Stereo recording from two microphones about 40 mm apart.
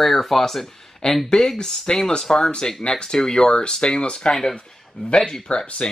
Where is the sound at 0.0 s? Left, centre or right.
Centre.